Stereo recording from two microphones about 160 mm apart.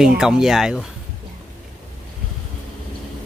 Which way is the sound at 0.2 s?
5° right (ahead or behind).